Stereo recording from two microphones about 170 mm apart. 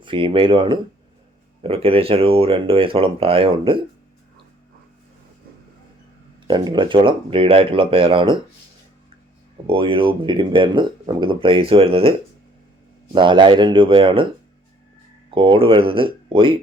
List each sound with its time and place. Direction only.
0.0 s speech: 30° right (ahead or behind)
6.5 s speech: 25° right (ahead or behind)
9.6 s speech: 30° right (ahead or behind)
13.1 s speech: 30° right (ahead or behind)
15.4 s speech: 30° right (ahead or behind)